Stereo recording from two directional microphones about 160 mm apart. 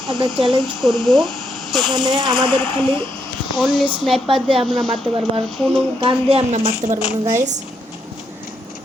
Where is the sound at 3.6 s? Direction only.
Centre (ahead or behind).